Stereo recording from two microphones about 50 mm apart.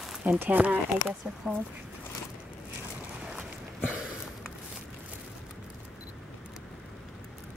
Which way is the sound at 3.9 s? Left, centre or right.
Centre.